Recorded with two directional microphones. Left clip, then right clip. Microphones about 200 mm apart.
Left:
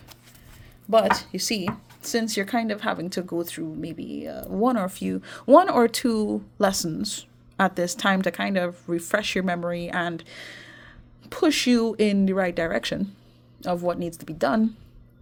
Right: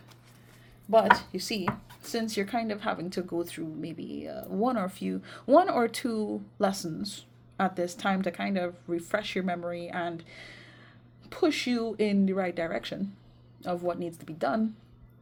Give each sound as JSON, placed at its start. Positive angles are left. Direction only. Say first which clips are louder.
{"t": 0.9, "sound": "speech", "louder": "left 2 dB", "side_deg": 45}